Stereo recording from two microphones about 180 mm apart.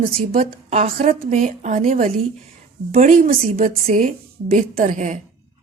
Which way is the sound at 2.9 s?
50° right (ahead or behind).